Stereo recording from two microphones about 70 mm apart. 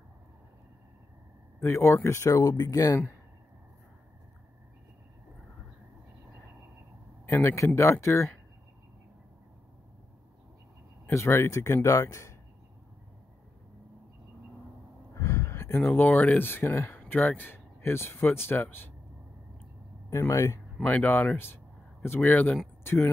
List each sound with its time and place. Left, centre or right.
1.6 s speech: left
7.2 s speech: left
11.1 s speech: left
15.1 s a sound: left
15.9 s speech: left
20.1 s speech: left
20.8 s speech: left
22.3 s speech: left